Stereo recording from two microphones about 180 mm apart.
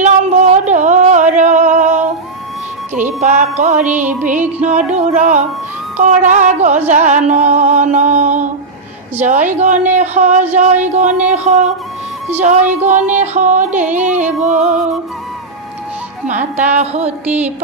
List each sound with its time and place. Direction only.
0.0 s a sound: 40° right (ahead or behind)
3.2 s music: 40° right (ahead or behind)
3.8 s music: 10° right (ahead or behind)
4.6 s music: 40° right (ahead or behind)
16.3 s music: 40° right (ahead or behind)